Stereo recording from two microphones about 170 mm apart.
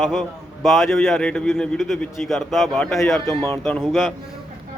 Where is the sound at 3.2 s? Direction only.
15° left (ahead or behind).